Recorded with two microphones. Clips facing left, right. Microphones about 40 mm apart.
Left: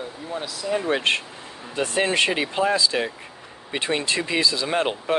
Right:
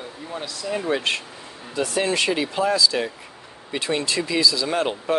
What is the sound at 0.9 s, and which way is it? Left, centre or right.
Speech, left.